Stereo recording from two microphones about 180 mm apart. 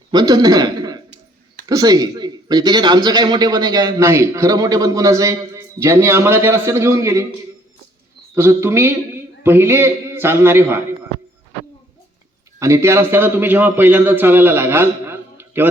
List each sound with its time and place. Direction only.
0.1 s a man's voice: 20° right (ahead or behind)
8.4 s a man's voice: 15° right (ahead or behind)
12.5 s a man's voice: 15° right (ahead or behind)